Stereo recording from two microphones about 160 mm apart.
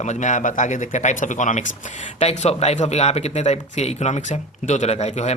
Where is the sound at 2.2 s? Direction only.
40° left (ahead or behind).